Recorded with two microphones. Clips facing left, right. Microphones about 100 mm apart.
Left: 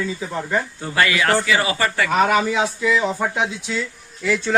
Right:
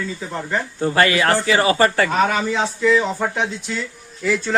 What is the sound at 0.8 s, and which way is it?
Speech, 35° right (ahead or behind).